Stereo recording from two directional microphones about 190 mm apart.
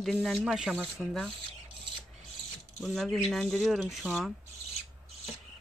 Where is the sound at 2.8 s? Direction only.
Centre (ahead or behind).